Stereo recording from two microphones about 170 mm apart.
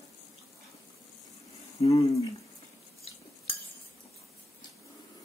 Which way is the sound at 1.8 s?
35° left (ahead or behind).